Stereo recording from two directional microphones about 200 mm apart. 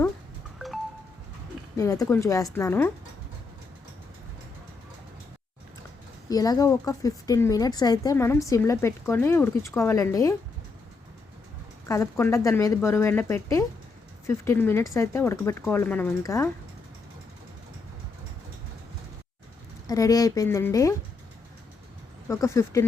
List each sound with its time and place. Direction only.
1.7 s speech: 15° left (ahead or behind)
6.2 s speech: 20° left (ahead or behind)
11.9 s speech: 15° left (ahead or behind)
19.9 s speech: 15° left (ahead or behind)
22.3 s speech: 15° left (ahead or behind)